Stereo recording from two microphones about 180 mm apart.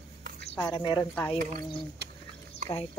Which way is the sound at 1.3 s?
45° right (ahead or behind).